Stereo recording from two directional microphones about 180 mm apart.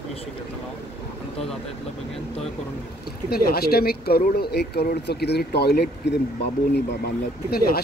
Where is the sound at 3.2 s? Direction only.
55° left (ahead or behind).